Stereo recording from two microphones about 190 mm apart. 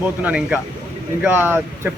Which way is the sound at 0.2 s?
5° right (ahead or behind).